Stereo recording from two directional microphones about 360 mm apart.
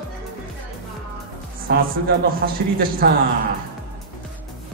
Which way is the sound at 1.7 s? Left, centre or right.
Right.